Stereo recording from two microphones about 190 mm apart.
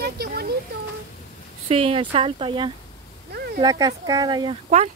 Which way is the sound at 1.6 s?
30° right (ahead or behind).